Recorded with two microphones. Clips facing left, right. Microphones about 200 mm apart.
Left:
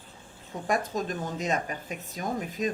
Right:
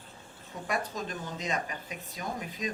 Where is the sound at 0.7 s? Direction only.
45° left (ahead or behind).